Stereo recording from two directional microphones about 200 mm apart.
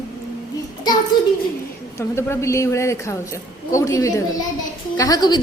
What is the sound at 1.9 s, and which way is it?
A woman's voice, 15° left (ahead or behind).